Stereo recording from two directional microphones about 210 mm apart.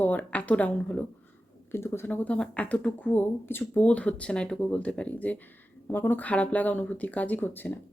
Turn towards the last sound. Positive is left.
turn(degrees=10)  # may be behind; listen again after turning